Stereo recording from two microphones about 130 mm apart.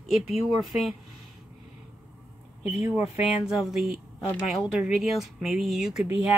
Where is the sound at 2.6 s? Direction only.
15° right (ahead or behind).